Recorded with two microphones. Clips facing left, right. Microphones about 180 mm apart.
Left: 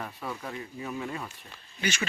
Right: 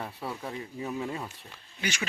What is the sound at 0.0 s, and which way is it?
A man's voice, 30° right (ahead or behind).